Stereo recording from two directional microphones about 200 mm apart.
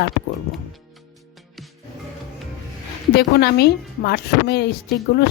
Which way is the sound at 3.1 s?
50° left (ahead or behind).